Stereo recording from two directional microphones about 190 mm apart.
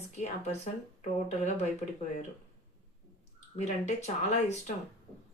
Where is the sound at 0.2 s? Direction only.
35° left (ahead or behind).